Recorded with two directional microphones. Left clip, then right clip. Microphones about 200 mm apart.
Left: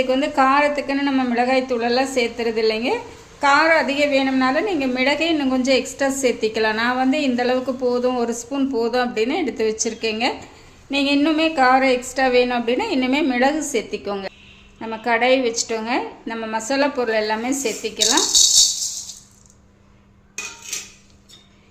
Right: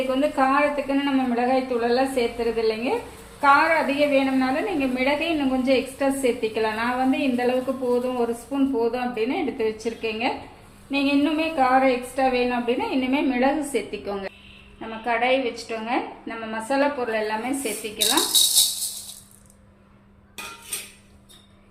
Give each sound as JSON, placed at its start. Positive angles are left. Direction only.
{"t": 0.1, "sound": "a woman's voice", "side_deg": 60}
{"t": 14.8, "sound": "a woman's voice", "side_deg": 45}